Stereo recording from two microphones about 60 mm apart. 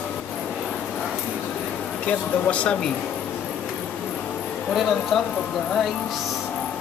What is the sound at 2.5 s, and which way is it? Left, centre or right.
Speech, left.